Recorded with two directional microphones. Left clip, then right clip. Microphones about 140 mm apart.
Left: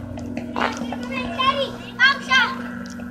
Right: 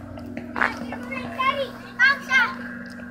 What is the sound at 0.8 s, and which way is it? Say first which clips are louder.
Children playing: left 4 dB; 20° right (ahead or behind).